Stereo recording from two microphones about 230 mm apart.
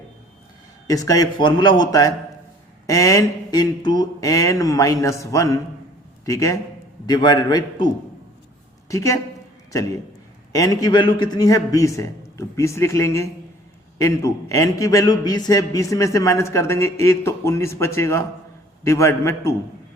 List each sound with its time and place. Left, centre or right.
0.9 s a man's voice: centre
8.9 s a woman's voice: centre
10.5 s a man's voice: centre